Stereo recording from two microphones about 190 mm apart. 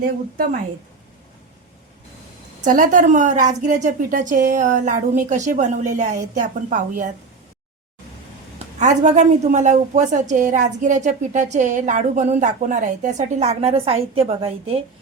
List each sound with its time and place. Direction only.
2.6 s a woman's voice: 45° right (ahead or behind)
8.5 s a woman's voice: 40° right (ahead or behind)